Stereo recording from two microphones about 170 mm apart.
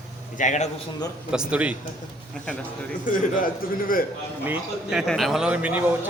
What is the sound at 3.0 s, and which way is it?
A man's voice, 50° left (ahead or behind).